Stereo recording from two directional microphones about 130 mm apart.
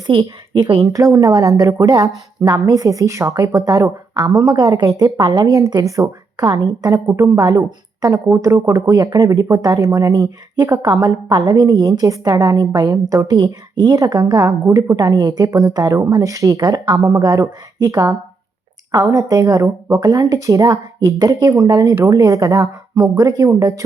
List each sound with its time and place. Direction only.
0.1 s a woman's voice: 40° right (ahead or behind)
0.8 s a woman's voice: 25° right (ahead or behind)